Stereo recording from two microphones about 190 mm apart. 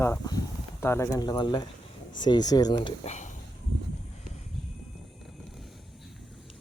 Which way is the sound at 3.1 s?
40° left (ahead or behind).